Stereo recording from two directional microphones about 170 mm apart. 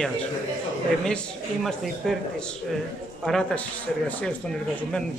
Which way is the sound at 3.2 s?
5° left (ahead or behind).